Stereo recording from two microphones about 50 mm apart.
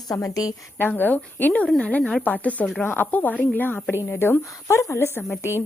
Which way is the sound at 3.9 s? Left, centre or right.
Left.